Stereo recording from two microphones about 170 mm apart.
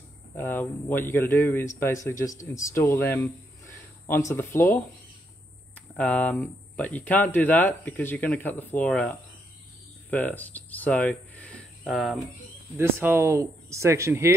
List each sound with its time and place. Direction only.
0.4 s speech: 10° left (ahead or behind)
5.9 s speech: 10° left (ahead or behind)
12.7 s speech: 15° right (ahead or behind)